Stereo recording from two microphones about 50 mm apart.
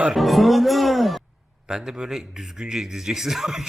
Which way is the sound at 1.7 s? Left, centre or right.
Centre.